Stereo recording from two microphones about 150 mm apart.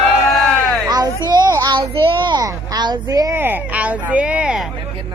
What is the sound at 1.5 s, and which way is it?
Speech, 25° right (ahead or behind).